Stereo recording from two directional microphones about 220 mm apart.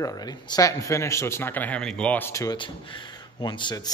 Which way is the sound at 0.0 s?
15° left (ahead or behind).